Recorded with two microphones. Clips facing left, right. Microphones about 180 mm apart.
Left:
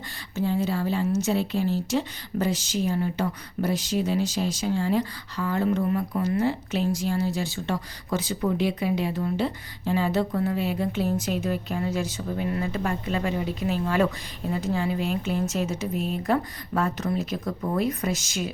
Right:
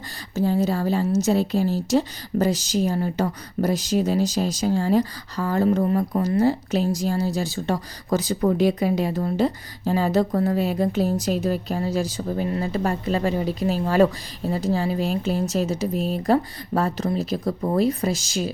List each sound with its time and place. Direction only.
0.3 s a woman's voice: 40° right (ahead or behind)